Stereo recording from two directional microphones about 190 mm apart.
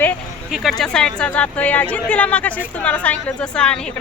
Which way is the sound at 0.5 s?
Centre (ahead or behind).